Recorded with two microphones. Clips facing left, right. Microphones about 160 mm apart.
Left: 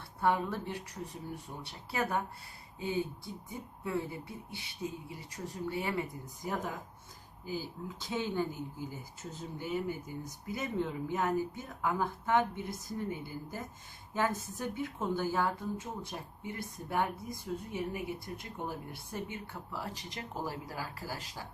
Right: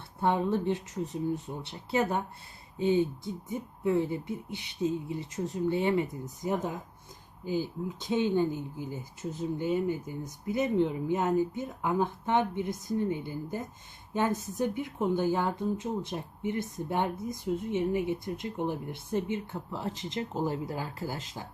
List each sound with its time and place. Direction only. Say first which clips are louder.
0.2 s speech: right 4 dB; 25° right (ahead or behind)